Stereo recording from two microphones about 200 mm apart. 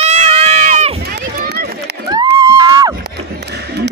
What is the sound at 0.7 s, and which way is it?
Run, 30° right (ahead or behind).